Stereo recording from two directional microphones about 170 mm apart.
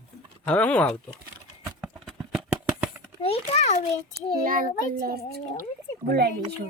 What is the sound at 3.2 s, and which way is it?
Speech, 35° left (ahead or behind).